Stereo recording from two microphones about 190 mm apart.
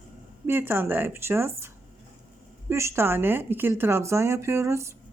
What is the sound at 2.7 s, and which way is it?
Speech, 15° right (ahead or behind).